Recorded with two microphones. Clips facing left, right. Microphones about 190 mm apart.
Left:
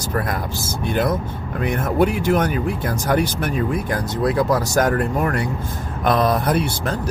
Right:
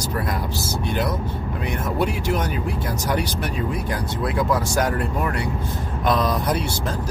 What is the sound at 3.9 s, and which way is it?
Speech, 40° left (ahead or behind).